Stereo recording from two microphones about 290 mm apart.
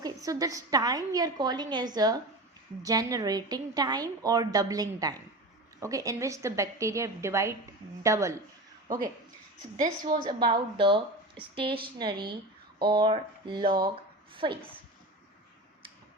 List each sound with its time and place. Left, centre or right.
0.0 s a woman's voice: centre
9.7 s a woman's voice: right
10.2 s a woman's voice: centre
13.7 s a sound: centre